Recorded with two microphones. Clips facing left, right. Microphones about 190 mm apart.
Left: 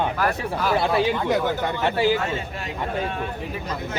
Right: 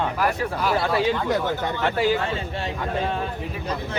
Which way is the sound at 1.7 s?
20° left (ahead or behind).